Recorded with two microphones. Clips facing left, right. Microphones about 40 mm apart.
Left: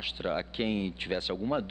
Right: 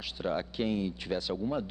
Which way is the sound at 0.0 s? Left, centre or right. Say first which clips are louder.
Left 1 dB; left.